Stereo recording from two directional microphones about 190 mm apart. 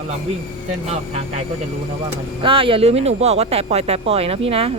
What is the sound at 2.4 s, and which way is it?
Speech, 30° right (ahead or behind).